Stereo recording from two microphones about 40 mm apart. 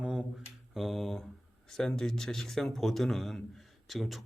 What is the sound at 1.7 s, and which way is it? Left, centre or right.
A man's voice, centre.